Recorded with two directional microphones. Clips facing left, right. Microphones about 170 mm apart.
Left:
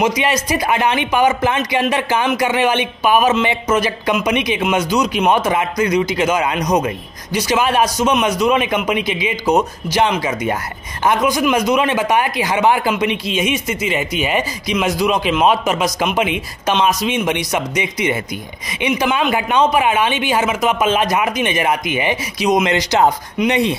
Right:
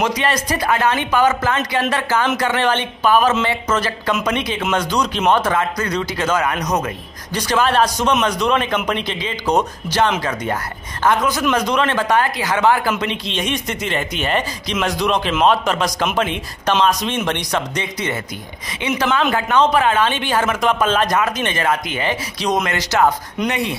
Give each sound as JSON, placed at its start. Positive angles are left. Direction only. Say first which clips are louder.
{"t": 0.0, "sound": "speech", "louder": "left 2 dB", "side_deg": 10}
{"t": 11.1, "sound": "speech", "louder": "left 2 dB", "side_deg": 15}